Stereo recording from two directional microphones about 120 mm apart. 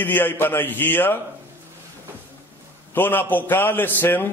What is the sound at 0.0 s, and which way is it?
Speech, 15° left (ahead or behind).